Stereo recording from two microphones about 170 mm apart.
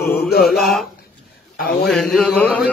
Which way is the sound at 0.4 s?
Centre (ahead or behind).